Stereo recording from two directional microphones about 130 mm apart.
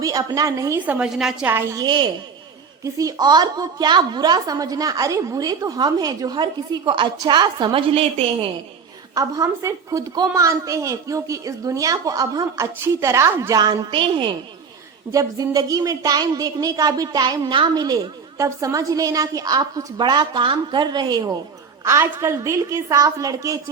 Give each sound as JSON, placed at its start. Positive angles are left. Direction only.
{"t": 0.0, "sound": "a woman's voice", "side_deg": -30}
{"t": 0.9, "sound": "a woman's voice", "side_deg": -10}
{"t": 1.5, "sound": "a woman's voice", "side_deg": -20}
{"t": 1.8, "sound": "a woman's voice", "side_deg": -35}
{"t": 9.1, "sound": "a woman's voice", "side_deg": -25}
{"t": 13.5, "sound": "a woman's voice", "side_deg": -30}
{"t": 15.1, "sound": "a woman's voice", "side_deg": -25}